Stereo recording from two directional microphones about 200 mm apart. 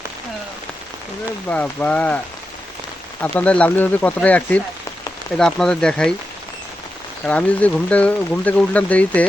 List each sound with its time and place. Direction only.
1.5 s speech: 5° left (ahead or behind)
7.3 s speech: 5° left (ahead or behind)